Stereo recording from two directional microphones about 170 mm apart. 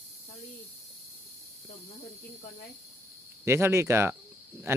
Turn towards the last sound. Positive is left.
turn(degrees=-15)  # may be behind; listen again after turning